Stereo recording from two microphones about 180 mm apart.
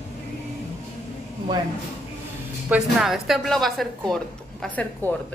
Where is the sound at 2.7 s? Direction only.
Centre (ahead or behind).